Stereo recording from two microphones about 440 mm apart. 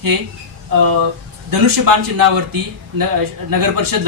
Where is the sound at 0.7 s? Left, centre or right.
Right.